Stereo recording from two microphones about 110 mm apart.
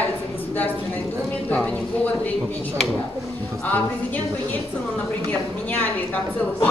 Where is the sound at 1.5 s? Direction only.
10° left (ahead or behind).